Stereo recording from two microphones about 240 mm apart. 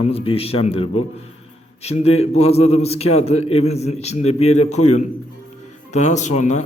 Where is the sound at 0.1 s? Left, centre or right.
Left.